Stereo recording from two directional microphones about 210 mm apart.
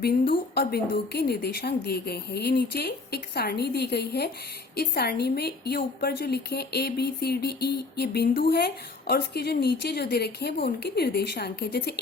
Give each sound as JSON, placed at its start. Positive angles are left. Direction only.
{"t": 0.0, "sound": "a woman's voice", "side_deg": 45}